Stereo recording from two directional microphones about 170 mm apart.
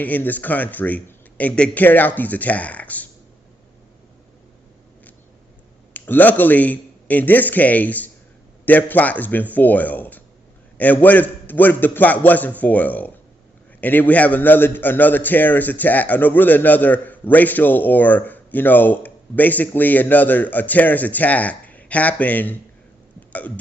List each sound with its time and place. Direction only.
0.0 s a man's voice: 10° left (ahead or behind)
5.9 s a man's voice: 10° left (ahead or behind)